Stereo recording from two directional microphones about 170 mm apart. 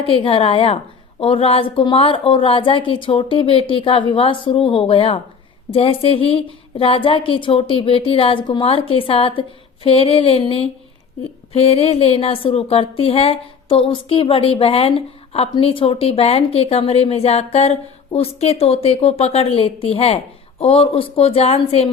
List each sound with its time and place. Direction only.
0.0 s a woman's voice: 30° left (ahead or behind)